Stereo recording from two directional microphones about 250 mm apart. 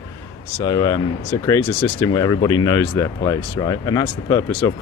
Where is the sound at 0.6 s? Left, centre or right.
Centre.